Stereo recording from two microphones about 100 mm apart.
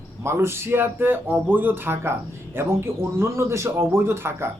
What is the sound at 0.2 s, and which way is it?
A man's voice, 25° right (ahead or behind).